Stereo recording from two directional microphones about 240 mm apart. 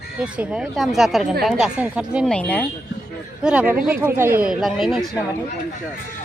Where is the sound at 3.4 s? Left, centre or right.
Centre.